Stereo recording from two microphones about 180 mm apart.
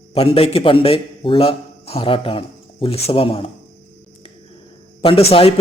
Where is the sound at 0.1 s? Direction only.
30° left (ahead or behind).